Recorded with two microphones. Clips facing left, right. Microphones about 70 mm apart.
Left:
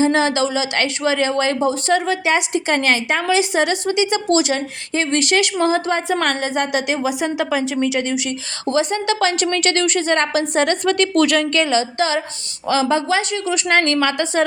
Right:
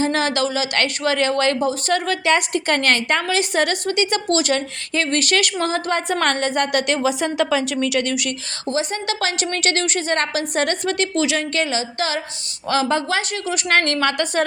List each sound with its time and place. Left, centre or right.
0.0 s a woman's voice: left
6.1 s a woman's voice: centre; by 8.0 s left
8.6 s a woman's voice: left
10.8 s a woman's voice: left
11.5 s a woman's voice: left
12.7 s a woman's voice: right
13.1 s a woman's voice: left